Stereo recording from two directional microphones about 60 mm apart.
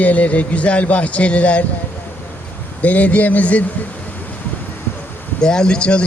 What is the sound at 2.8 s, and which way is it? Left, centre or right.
Speech, left.